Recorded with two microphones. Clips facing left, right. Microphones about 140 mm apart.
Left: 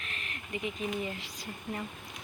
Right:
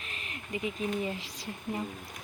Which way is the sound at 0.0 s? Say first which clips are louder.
Even; 30° right (ahead or behind).